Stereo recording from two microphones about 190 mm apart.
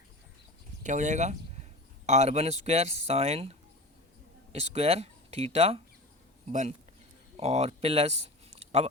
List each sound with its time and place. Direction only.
0.8 s speech: 40° right (ahead or behind)